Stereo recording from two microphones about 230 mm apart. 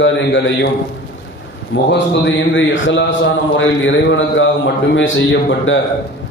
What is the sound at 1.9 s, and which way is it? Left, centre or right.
A man's voice, left.